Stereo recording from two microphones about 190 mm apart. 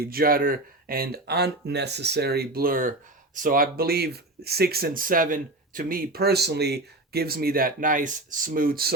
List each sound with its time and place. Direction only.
0.0 s speech: 50° right (ahead or behind)